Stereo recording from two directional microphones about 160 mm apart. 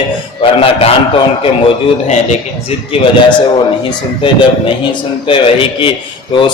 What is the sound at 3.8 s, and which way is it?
A man's voice, 30° left (ahead or behind).